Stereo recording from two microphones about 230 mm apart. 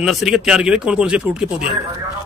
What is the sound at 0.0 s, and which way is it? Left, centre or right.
A man's voice, centre.